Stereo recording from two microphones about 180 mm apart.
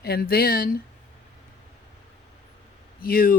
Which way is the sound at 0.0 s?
60° left (ahead or behind).